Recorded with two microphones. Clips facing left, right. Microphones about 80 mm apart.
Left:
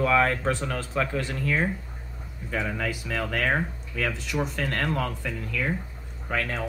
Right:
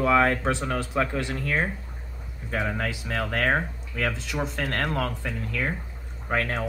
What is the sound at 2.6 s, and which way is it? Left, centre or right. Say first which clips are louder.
Speech: right 2 dB; right.